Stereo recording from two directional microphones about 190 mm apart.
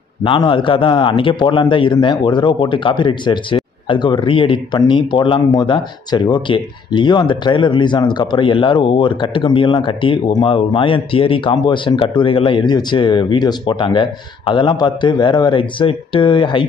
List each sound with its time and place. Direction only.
0.2 s a man's voice: 25° left (ahead or behind)